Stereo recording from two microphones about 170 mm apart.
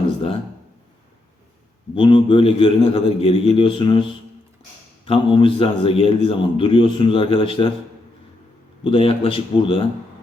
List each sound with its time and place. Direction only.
2.0 s a man's voice: 30° left (ahead or behind)
8.8 s a man's voice: 35° left (ahead or behind)